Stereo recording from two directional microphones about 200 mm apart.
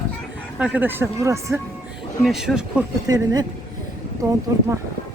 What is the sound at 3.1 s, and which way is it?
Speech, 20° right (ahead or behind).